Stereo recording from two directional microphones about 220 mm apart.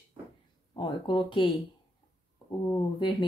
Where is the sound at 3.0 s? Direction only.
20° left (ahead or behind).